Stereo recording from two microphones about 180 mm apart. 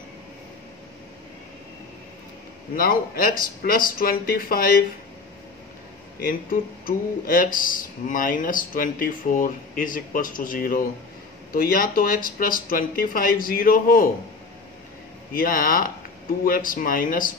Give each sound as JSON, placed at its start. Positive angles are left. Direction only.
{"t": 2.7, "sound": "speech", "side_deg": 55}
{"t": 6.2, "sound": "speech", "side_deg": 50}
{"t": 15.3, "sound": "speech", "side_deg": 50}